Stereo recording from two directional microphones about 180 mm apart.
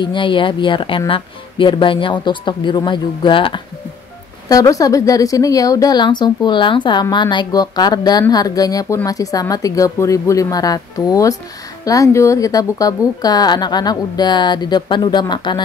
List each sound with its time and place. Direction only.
0.0 s a woman's voice: 25° left (ahead or behind)